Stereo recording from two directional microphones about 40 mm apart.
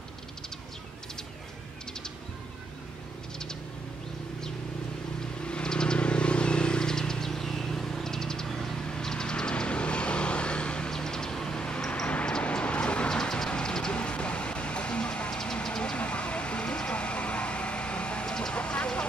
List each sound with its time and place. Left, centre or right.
5.4 s a sound: left
5.9 s vehicle: left
10.9 s a sound: centre
12.3 s vehicle: left
13.1 s ratchet: centre
13.5 s vehicle: centre
13.9 s music: left
15.6 s vehicle: centre
16.0 s vehicle: left